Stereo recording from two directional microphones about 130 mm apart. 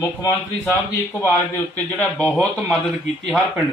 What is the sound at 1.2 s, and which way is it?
A man's voice, 15° left (ahead or behind).